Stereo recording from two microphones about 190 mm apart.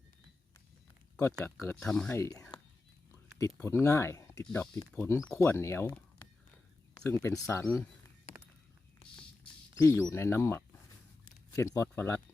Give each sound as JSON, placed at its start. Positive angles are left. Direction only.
{"t": 1.2, "sound": "speech", "side_deg": 5}
{"t": 2.1, "sound": "speech", "side_deg": 15}
{"t": 7.0, "sound": "speech", "side_deg": 15}
{"t": 9.8, "sound": "speech", "side_deg": 15}